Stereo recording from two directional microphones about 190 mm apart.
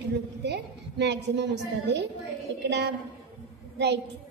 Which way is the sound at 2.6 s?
65° right (ahead or behind).